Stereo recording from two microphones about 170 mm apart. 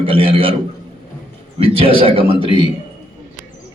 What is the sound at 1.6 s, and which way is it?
Speech, 30° right (ahead or behind).